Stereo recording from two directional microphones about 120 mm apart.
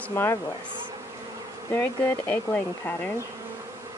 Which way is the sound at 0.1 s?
25° left (ahead or behind).